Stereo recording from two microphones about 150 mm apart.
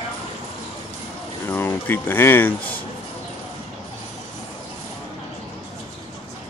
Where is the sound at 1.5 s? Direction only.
15° left (ahead or behind).